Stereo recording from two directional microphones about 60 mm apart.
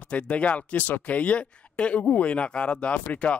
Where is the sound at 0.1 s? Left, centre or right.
Left.